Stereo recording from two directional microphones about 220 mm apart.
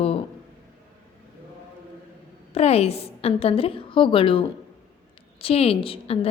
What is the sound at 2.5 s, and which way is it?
A woman's voice, 30° left (ahead or behind).